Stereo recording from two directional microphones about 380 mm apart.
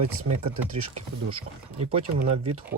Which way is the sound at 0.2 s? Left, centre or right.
Right.